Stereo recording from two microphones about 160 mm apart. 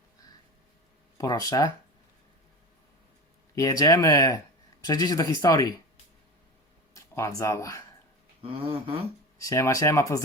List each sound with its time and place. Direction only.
1.2 s speech: 20° left (ahead or behind)
3.5 s speech: 20° left (ahead or behind)
6.9 s speech: 20° left (ahead or behind)
8.4 s a sound: 35° right (ahead or behind)
9.4 s speech: 20° left (ahead or behind)